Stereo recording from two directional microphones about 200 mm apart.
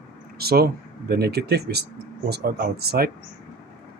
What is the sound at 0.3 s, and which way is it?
Speech, 50° right (ahead or behind).